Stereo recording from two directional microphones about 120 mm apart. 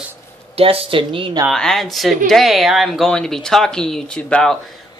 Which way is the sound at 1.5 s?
5° left (ahead or behind).